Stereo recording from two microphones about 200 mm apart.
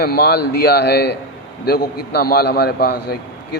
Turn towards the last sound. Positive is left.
turn(degrees=50)  # may be behind; listen again after turning